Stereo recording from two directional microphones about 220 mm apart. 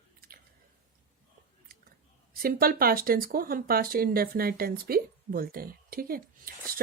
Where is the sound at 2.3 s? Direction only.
40° right (ahead or behind).